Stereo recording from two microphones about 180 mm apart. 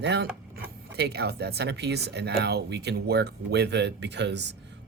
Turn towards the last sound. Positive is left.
turn(degrees=-75)  # may be behind; listen again after turning